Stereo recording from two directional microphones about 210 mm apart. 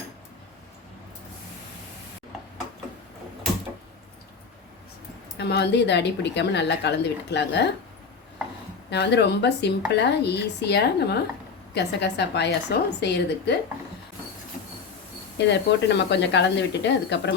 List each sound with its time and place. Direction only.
5.4 s a woman's voice: 50° left (ahead or behind)
8.9 s speech: 55° left (ahead or behind)
15.4 s a woman's voice: 55° left (ahead or behind)